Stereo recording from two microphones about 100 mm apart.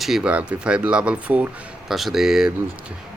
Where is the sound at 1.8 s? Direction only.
Centre (ahead or behind).